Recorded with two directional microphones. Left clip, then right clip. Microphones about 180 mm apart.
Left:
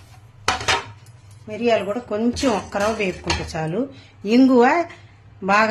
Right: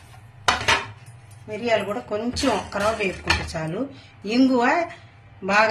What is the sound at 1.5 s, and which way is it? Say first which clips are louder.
Speech: left 3 dB; 55° left (ahead or behind).